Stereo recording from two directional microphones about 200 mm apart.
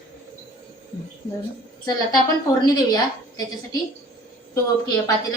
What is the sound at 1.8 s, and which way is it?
A woman's voice, 20° left (ahead or behind).